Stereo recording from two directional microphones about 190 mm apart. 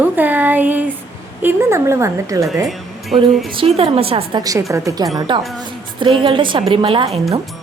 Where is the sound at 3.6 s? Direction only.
30° right (ahead or behind).